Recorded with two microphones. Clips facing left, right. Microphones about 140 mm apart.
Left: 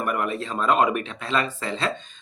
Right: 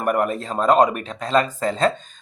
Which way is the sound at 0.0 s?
45° right (ahead or behind).